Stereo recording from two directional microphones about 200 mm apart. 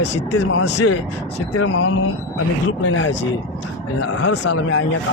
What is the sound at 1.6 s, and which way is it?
Speech, 90° left.